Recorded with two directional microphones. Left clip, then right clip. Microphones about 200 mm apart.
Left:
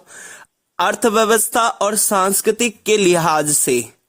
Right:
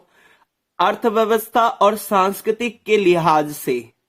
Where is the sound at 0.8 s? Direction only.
45° left (ahead or behind).